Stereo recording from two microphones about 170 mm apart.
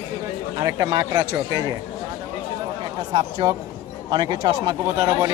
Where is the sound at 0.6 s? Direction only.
25° right (ahead or behind).